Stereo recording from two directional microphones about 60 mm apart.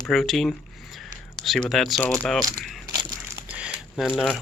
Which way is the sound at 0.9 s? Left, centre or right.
Centre.